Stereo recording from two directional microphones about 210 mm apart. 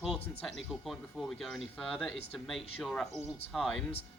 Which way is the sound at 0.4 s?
Centre (ahead or behind).